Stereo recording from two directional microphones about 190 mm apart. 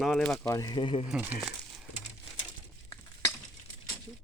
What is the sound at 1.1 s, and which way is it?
Speech, 5° right (ahead or behind).